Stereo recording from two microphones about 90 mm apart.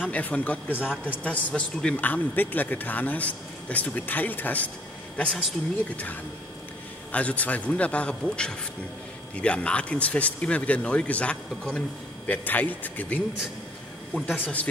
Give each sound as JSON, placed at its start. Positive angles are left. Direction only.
{"t": 0.1, "sound": "a man's voice", "side_deg": 15}
{"t": 7.1, "sound": "a man's voice", "side_deg": 15}